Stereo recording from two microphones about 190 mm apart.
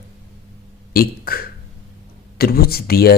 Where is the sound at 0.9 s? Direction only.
50° left (ahead or behind).